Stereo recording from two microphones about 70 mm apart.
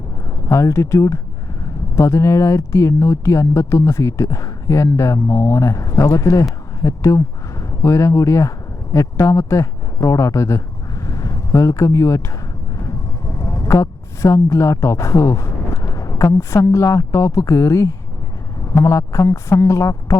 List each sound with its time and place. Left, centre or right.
0.3 s speech: left